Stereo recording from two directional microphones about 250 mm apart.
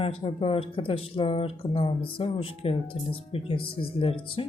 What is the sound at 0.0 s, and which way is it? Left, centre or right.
Speech, left.